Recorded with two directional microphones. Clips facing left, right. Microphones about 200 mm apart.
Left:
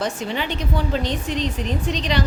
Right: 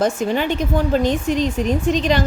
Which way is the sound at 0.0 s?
45° right (ahead or behind).